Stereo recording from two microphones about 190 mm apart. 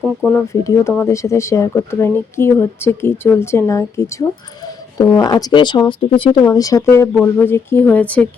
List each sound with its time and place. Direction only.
0.3 s speech: 15° left (ahead or behind)